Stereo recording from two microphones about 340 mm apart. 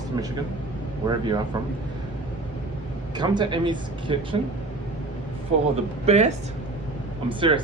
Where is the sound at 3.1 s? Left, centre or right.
Centre.